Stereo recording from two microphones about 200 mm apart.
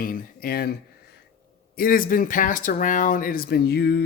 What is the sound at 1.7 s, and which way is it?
Speech, 45° left (ahead or behind).